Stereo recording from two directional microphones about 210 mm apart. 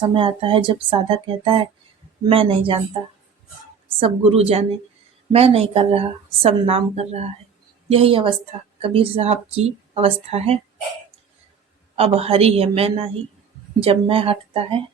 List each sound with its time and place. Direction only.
0.0 s a woman's voice: 25° right (ahead or behind)
3.8 s a woman's voice: 25° right (ahead or behind)
11.9 s a woman's voice: 30° right (ahead or behind)